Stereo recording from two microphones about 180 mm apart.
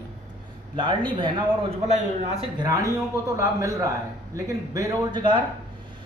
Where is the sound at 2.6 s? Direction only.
20° right (ahead or behind).